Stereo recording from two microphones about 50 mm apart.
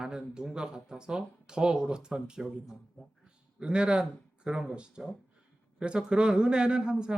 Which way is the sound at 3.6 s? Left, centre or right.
Centre.